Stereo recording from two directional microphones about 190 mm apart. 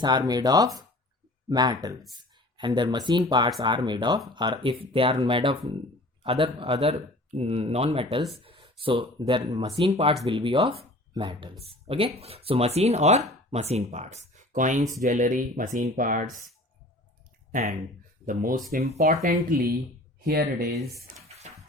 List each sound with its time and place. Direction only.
0.0 s speech: 20° right (ahead or behind); by 16.4 s 45° right (ahead or behind)
17.5 s speech: 55° right (ahead or behind)
21.5 s music: 35° right (ahead or behind)